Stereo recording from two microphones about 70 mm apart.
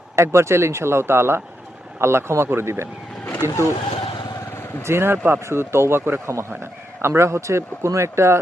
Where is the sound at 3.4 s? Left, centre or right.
Right.